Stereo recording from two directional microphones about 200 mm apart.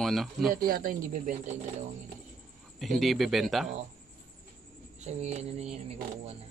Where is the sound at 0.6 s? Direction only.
45° right (ahead or behind).